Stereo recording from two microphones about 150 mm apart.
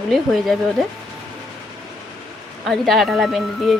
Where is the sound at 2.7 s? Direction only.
Centre (ahead or behind).